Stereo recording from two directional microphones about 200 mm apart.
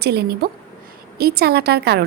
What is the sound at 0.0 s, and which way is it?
A woman's voice, 55° right (ahead or behind).